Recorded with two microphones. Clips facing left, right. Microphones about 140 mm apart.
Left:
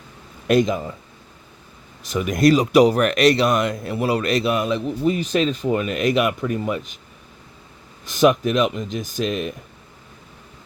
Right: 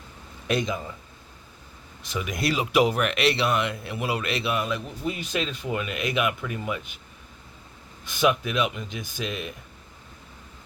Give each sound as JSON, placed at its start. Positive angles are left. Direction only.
{"t": 0.4, "sound": "speech", "side_deg": 50}
{"t": 2.0, "sound": "speech", "side_deg": 50}
{"t": 8.2, "sound": "speech", "side_deg": 45}